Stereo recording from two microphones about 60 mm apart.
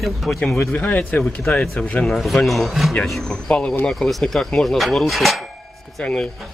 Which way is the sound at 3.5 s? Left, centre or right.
Centre.